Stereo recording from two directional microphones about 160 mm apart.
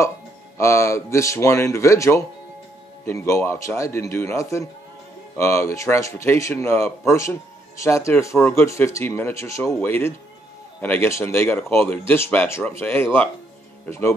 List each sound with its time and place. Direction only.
0.6 s speech: 15° left (ahead or behind)